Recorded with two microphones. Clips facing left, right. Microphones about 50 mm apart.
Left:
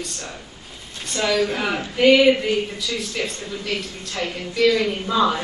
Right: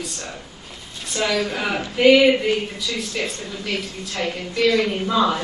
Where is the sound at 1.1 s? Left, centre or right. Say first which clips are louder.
Left 1 dB; centre.